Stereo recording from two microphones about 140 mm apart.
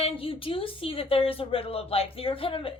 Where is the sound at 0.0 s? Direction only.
40° left (ahead or behind).